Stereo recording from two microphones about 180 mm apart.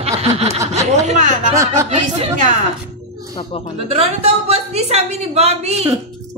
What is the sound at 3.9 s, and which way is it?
A woman's voice, 35° right (ahead or behind).